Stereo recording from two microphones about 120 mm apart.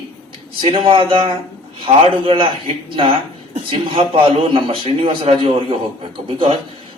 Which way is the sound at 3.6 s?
50° right (ahead or behind).